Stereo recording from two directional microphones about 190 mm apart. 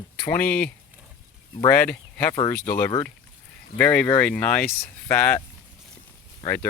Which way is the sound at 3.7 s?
5° left (ahead or behind).